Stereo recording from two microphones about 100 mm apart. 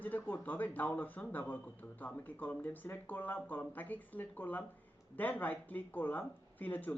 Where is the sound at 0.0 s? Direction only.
15° left (ahead or behind).